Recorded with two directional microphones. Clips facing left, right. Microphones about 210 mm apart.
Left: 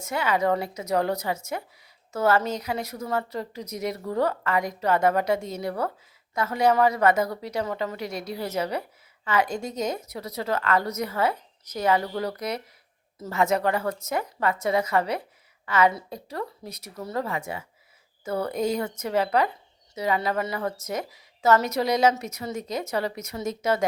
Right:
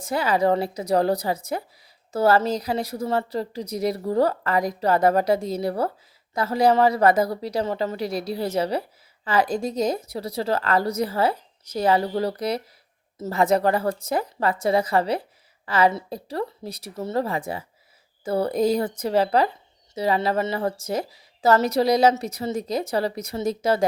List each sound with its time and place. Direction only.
0.0 s a woman's voice: 35° right (ahead or behind)